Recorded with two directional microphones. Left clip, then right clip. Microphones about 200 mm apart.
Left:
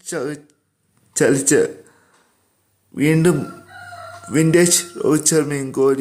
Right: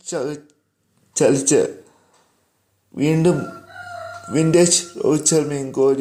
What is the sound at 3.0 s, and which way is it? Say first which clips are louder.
Speech: left 1 dB; 10° left (ahead or behind).